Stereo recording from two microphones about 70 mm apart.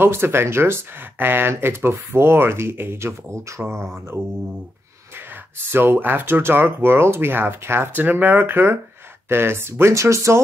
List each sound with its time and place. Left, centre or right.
0.0 s speech: right
5.1 s speech: right